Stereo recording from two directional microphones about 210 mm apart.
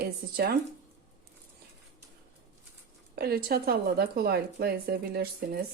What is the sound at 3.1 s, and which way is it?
Speech, 45° right (ahead or behind).